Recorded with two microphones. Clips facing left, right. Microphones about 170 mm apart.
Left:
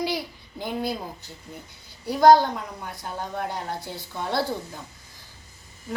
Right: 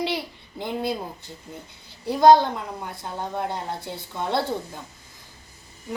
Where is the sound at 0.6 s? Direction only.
25° right (ahead or behind).